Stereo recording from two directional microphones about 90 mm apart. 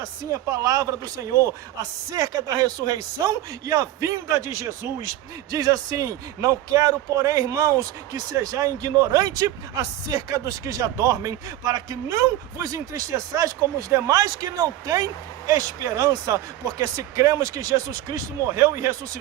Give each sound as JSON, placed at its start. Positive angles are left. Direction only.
{"t": 0.5, "sound": "a man's voice", "side_deg": -40}